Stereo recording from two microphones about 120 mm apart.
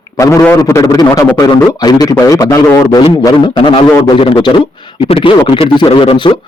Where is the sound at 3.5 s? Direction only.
45° left (ahead or behind).